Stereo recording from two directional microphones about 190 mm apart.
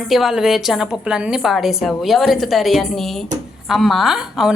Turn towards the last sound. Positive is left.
turn(degrees=-5)  # may be behind; listen again after turning